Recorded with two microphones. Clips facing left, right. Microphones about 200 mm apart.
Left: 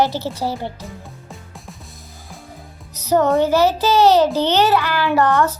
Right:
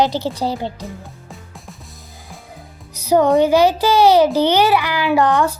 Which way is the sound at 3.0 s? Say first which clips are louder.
Right 2 dB; 10° right (ahead or behind).